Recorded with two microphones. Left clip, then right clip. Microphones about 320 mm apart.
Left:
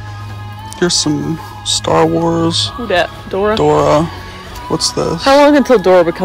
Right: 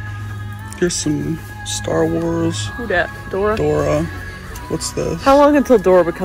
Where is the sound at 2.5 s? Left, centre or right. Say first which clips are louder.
Left 6 dB; left.